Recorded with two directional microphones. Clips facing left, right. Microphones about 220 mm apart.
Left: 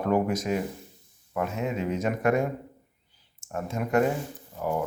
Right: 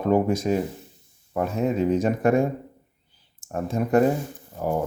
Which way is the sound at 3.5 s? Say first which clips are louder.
Right 5 dB; 35° right (ahead or behind).